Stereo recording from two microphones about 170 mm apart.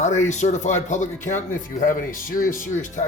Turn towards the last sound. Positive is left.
turn(degrees=50)  # may be behind; listen again after turning